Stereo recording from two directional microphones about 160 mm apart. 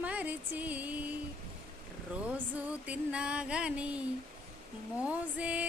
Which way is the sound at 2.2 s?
10° right (ahead or behind).